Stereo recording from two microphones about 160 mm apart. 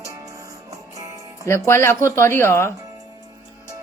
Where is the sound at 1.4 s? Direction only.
15° left (ahead or behind).